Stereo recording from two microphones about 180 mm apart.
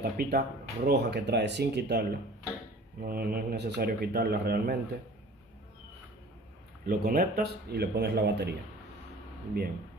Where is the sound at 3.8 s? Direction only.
60° right (ahead or behind).